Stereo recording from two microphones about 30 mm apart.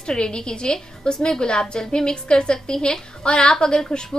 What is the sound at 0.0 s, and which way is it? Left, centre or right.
Speech, left.